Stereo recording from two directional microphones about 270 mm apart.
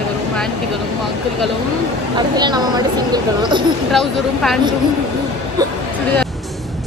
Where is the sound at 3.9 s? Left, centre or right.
Centre.